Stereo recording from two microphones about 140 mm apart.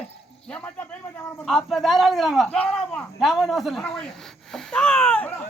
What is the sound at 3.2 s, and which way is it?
A man's voice, centre (ahead or behind).